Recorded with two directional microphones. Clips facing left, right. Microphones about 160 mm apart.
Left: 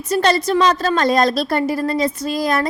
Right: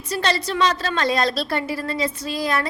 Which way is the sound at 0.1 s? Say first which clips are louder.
Left 7 dB; 45° left (ahead or behind).